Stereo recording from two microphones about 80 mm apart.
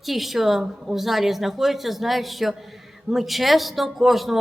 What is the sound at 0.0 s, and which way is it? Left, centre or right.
Speech, centre.